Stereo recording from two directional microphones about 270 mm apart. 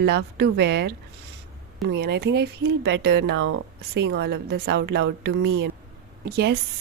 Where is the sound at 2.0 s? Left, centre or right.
Right.